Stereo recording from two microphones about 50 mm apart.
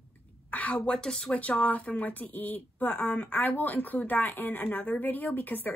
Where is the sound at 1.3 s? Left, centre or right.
Left.